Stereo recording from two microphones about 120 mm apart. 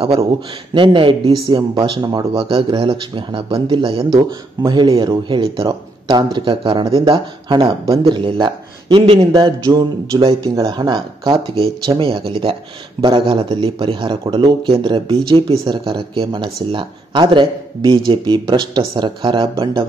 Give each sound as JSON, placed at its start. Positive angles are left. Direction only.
{"t": 0.7, "sound": "speech", "side_deg": -45}
{"t": 9.3, "sound": "speech", "side_deg": -35}